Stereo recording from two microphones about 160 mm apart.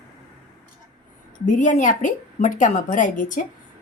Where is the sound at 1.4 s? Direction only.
50° left (ahead or behind).